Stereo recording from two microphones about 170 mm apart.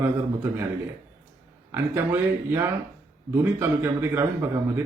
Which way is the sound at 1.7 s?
15° right (ahead or behind).